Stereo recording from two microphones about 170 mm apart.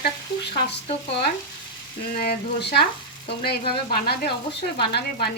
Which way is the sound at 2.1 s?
70° left (ahead or behind).